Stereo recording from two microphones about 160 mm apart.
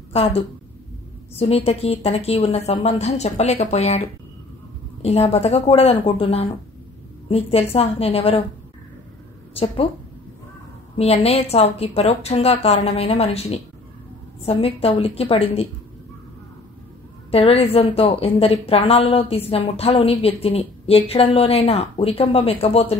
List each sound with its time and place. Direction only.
0.1 s a woman's voice: 40° left (ahead or behind)
1.4 s a woman's voice: 35° left (ahead or behind)
5.0 s a woman's voice: 40° left (ahead or behind)
9.5 s speech: 35° left (ahead or behind)
11.0 s a woman's voice: 40° left (ahead or behind)
17.3 s a woman's voice: 40° left (ahead or behind)